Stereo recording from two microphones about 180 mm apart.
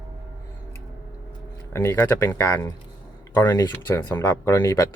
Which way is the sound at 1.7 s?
15° left (ahead or behind).